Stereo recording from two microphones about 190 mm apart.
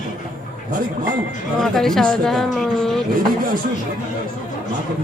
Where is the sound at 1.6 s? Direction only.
Centre (ahead or behind).